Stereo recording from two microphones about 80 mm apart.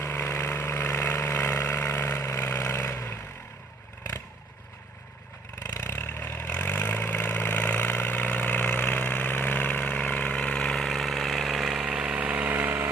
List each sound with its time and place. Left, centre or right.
0.0 s vehicle: left
5.6 s vehicle: left; by 12.9 s right